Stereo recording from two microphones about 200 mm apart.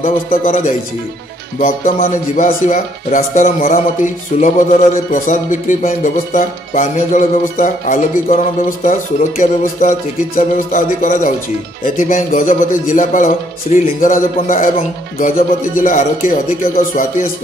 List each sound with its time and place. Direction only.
0.0 s speech: 40° left (ahead or behind)